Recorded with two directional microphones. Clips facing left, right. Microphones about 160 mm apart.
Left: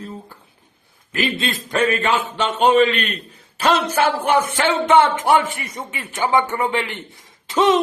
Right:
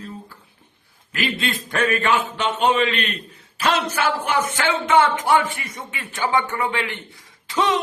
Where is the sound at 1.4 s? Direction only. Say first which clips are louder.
Left 2 dB; 35° left (ahead or behind).